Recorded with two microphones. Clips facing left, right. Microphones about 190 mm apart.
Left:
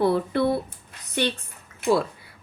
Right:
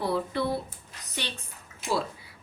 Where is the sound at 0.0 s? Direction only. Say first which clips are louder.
Left 7 dB; 60° left (ahead or behind).